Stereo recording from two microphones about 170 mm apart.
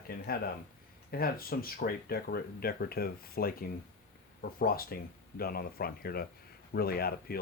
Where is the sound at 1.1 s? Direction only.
60° left (ahead or behind).